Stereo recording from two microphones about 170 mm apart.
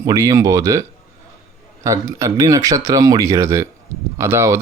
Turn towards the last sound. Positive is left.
turn(degrees=-15)  # may be behind; listen again after turning